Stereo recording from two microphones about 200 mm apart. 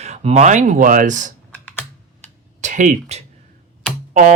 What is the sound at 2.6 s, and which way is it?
Speech, 40° right (ahead or behind).